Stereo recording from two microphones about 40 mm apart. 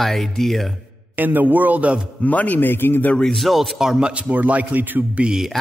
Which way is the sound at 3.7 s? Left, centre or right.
Centre.